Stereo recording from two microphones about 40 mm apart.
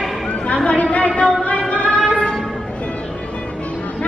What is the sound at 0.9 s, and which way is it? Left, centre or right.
Music, left.